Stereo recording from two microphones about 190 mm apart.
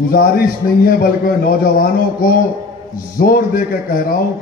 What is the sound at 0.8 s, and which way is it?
A man's voice, 50° left (ahead or behind).